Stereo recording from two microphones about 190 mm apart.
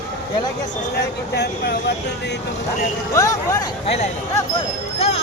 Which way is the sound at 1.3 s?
60° left (ahead or behind).